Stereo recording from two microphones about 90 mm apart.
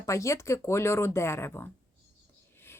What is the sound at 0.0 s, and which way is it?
Speech, 35° left (ahead or behind).